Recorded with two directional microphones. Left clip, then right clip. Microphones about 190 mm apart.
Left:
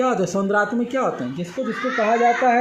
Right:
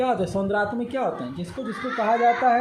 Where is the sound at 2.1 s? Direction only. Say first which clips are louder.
Left 1 dB; 50° left (ahead or behind).